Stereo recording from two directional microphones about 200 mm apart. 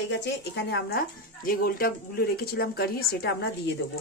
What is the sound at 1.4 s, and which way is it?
Speech, 50° left (ahead or behind).